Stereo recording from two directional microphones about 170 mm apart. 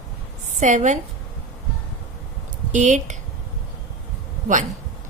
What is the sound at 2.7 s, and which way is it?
Speech, 45° right (ahead or behind).